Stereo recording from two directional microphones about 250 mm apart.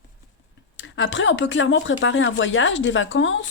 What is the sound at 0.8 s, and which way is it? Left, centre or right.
Speech, left.